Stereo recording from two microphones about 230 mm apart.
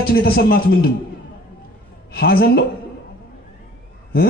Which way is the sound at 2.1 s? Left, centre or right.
Left.